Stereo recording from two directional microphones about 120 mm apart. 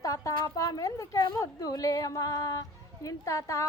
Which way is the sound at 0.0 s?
30° left (ahead or behind).